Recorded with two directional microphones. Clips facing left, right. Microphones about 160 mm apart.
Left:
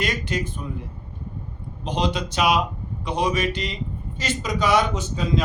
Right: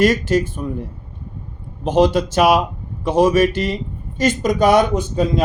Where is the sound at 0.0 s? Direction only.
45° right (ahead or behind).